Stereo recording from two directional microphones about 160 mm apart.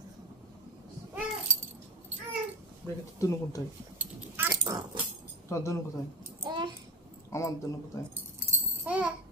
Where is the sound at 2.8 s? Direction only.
20° left (ahead or behind).